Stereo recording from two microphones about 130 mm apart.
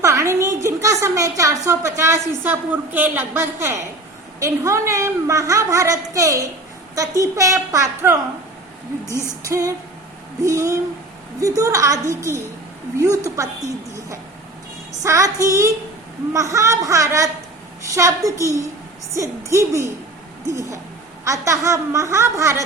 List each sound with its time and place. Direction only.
0.0 s a woman's voice: 20° right (ahead or behind)
9.0 s female singing: 20° left (ahead or behind)
9.4 s a woman's voice: 25° right (ahead or behind)
15.0 s a woman's voice: 25° right (ahead or behind)